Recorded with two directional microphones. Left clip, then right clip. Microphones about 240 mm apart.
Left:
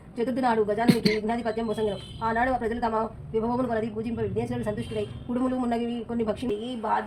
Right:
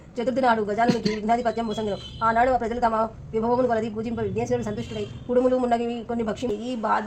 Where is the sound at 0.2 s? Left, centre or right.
Right.